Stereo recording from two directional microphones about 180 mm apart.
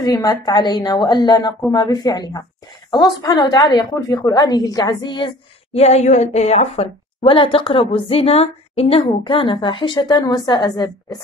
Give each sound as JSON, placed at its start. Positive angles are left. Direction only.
{"t": 0.0, "sound": "a woman's voice", "side_deg": 20}